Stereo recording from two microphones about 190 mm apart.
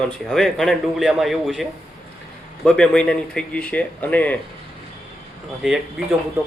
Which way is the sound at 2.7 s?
5° left (ahead or behind).